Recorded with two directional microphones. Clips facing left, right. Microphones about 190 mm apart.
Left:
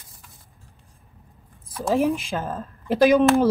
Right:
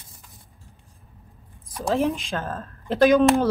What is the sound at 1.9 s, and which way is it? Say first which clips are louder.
Speech: left 2 dB; 10° left (ahead or behind).